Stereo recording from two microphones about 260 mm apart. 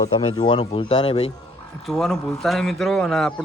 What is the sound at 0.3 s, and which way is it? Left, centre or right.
Speech, centre.